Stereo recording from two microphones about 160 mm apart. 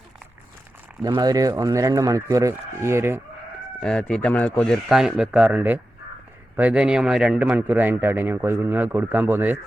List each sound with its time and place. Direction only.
1.0 s speech: 25° right (ahead or behind)
3.8 s a man's voice: 5° left (ahead or behind); by 9.6 s 10° right (ahead or behind)